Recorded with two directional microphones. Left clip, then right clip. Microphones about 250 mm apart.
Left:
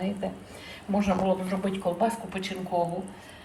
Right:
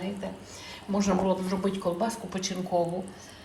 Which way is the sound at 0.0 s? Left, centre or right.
Centre.